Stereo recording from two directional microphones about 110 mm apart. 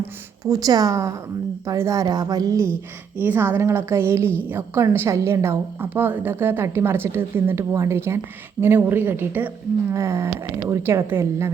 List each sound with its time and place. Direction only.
0.0 s a woman's voice: 30° right (ahead or behind)
3.2 s a woman's voice: 20° right (ahead or behind)